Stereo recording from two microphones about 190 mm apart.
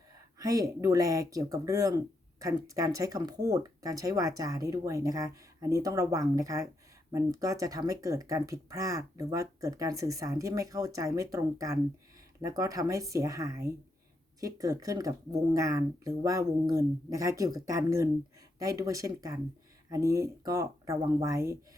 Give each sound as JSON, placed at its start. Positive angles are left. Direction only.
{"t": 0.3, "sound": "speech", "side_deg": -20}